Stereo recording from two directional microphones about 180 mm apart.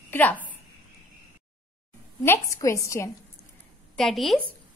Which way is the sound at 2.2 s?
15° left (ahead or behind).